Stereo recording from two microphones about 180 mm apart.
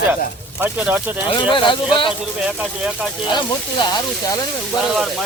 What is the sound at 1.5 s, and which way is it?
Speech, 25° left (ahead or behind).